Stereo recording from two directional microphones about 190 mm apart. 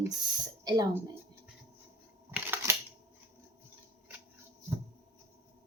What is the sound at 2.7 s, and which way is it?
Scissors, 15° right (ahead or behind).